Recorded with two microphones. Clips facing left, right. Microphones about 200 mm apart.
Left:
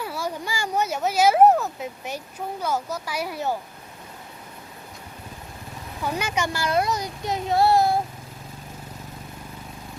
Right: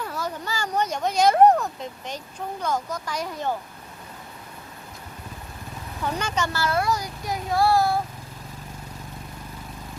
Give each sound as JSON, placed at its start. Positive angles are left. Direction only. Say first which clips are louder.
{"t": 0.0, "sound": "speech", "louder": "left 1 dB", "side_deg": 10}
{"t": 6.0, "sound": "a child's voice", "louder": "left 1 dB", "side_deg": 10}